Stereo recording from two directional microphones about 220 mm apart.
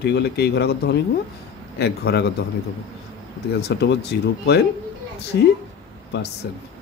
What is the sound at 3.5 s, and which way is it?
Speech, 50° left (ahead or behind).